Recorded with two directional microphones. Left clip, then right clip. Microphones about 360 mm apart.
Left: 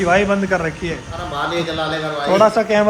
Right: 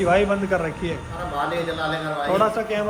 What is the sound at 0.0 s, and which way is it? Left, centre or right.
Speech, centre.